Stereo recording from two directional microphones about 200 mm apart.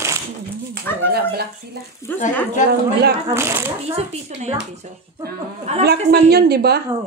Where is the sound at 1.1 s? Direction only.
50° right (ahead or behind).